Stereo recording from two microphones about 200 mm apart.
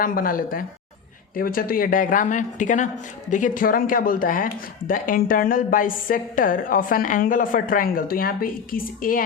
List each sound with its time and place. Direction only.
0.0 s a woman's voice: 45° left (ahead or behind)